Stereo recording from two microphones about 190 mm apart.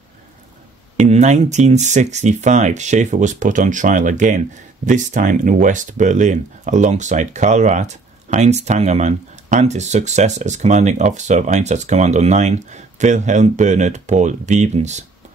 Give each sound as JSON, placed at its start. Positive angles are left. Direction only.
{"t": 0.9, "sound": "speech", "side_deg": -35}